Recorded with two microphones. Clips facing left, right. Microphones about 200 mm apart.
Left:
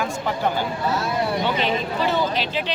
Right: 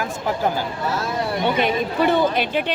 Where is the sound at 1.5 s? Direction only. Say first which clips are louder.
Right 3 dB; 55° right (ahead or behind).